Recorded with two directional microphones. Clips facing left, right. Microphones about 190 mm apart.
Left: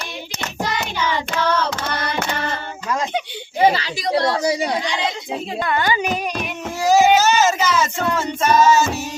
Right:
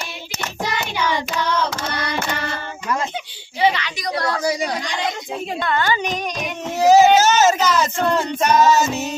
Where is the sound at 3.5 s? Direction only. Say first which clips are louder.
Left 3 dB; 40° left (ahead or behind); by 4.7 s 25° left (ahead or behind).